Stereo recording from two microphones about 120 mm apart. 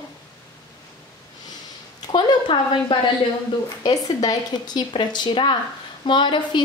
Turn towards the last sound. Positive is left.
turn(degrees=40)  # may be behind; listen again after turning